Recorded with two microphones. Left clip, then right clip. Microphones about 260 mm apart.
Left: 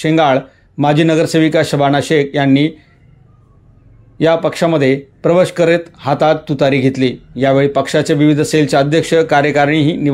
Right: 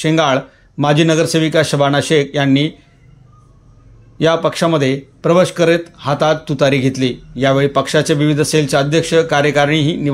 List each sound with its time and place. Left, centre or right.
0.0 s speech: centre
4.2 s speech: centre